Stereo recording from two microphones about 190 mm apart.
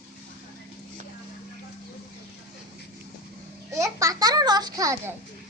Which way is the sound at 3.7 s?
15° right (ahead or behind).